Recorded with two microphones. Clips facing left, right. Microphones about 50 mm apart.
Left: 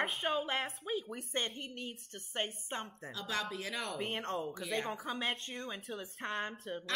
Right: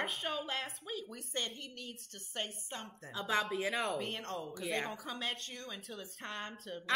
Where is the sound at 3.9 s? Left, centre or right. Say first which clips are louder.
Left 1 dB; centre.